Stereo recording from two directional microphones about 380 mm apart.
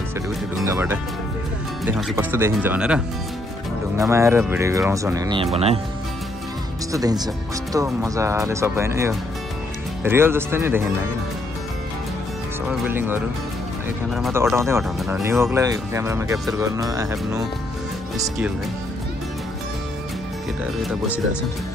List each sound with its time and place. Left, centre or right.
0.6 s speech: centre
4.0 s speech: centre
6.9 s speech: centre
12.6 s speech: centre